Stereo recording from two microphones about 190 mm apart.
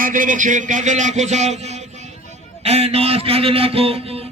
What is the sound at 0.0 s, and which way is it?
A man's voice, 45° right (ahead or behind).